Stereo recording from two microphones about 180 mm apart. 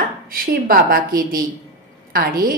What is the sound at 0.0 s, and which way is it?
A woman's voice, 55° right (ahead or behind).